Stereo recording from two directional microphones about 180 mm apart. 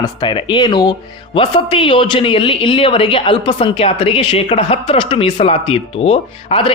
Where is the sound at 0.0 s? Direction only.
25° left (ahead or behind).